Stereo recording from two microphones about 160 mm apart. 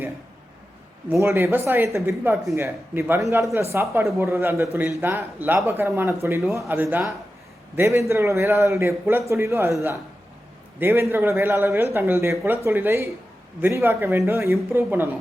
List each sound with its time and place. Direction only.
1.0 s a man's voice: 15° right (ahead or behind)
10.8 s a man's voice: 15° right (ahead or behind)